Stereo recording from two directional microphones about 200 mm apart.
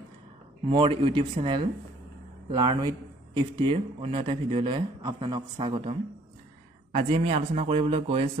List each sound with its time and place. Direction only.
0.7 s speech: 25° right (ahead or behind)